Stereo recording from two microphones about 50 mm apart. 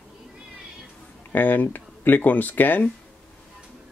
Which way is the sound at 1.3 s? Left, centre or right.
Left.